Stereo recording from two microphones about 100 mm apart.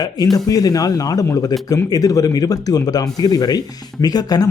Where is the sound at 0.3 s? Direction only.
40° left (ahead or behind).